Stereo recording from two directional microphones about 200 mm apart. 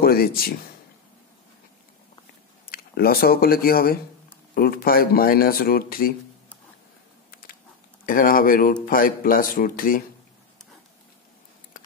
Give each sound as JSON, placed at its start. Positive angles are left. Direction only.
{"t": 0.0, "sound": "speech", "side_deg": 50}
{"t": 2.7, "sound": "speech", "side_deg": 50}
{"t": 8.0, "sound": "speech", "side_deg": 45}